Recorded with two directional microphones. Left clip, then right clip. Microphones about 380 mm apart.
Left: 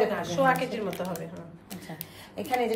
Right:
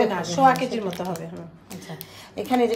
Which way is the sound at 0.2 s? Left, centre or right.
Centre.